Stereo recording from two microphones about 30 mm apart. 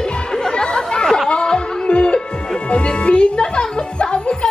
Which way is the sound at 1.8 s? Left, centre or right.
Left.